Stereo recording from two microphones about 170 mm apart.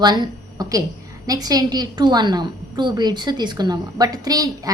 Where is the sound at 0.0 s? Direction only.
25° right (ahead or behind).